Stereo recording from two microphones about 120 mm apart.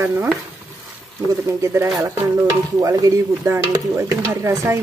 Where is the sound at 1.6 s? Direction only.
25° right (ahead or behind).